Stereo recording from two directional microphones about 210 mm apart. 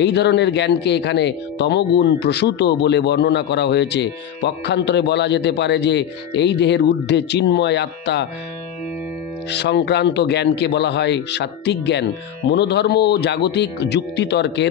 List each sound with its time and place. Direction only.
0.0 s speech: 55° left (ahead or behind)
9.5 s speech: 55° left (ahead or behind)